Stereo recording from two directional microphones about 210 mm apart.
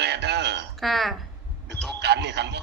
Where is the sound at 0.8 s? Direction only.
Centre (ahead or behind).